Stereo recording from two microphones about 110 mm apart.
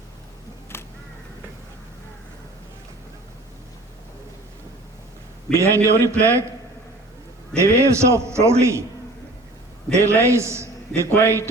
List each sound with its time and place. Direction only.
0.7 s crow: 20° left (ahead or behind)
5.5 s a man's voice: 25° right (ahead or behind)
7.5 s a man's voice: 25° right (ahead or behind)
9.9 s a man's voice: 25° right (ahead or behind)
11.1 s a man's voice: 20° left (ahead or behind)